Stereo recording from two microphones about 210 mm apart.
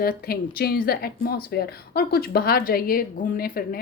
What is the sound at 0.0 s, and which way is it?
Speech, 45° left (ahead or behind).